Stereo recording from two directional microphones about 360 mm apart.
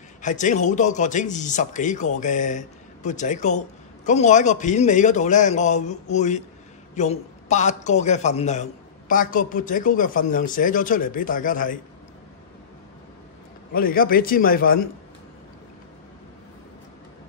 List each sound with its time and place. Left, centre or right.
0.2 s speech: left
13.7 s speech: left